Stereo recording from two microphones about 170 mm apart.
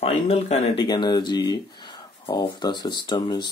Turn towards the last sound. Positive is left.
turn(degrees=25)  # may be behind; listen again after turning